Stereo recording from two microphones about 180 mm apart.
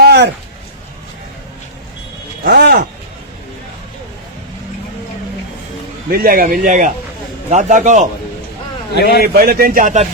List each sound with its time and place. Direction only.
0.0 s a sound: 65° right (ahead or behind)
2.4 s speech: 65° right (ahead or behind)
6.1 s speech: 55° right (ahead or behind)
9.0 s a man's voice: 65° left (ahead or behind)
9.2 s speech: 55° right (ahead or behind)